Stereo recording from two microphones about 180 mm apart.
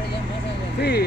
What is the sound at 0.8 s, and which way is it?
Speech, 65° left (ahead or behind).